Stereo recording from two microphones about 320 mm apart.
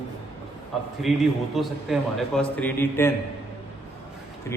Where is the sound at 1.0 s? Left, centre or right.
Centre.